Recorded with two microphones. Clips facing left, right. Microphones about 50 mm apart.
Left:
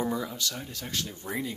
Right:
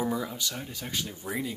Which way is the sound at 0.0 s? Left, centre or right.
Centre.